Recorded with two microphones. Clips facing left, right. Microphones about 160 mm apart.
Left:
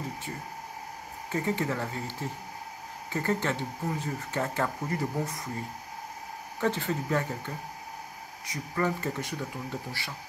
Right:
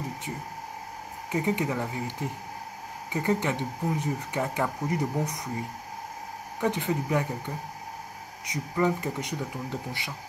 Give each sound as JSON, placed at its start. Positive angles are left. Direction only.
{"t": 1.3, "sound": "speech", "side_deg": -15}
{"t": 6.6, "sound": "speech", "side_deg": -15}